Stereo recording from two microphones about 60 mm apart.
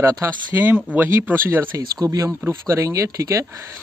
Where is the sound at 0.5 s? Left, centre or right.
Right.